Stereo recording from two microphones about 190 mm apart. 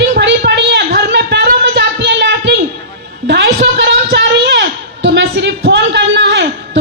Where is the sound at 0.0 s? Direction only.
65° right (ahead or behind).